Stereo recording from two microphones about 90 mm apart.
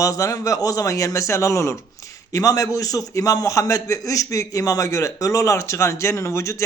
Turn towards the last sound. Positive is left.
turn(degrees=35)  # may be behind; listen again after turning